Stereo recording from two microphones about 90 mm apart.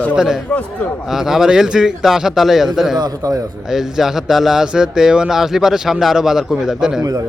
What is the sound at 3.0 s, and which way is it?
Speech, 40° right (ahead or behind).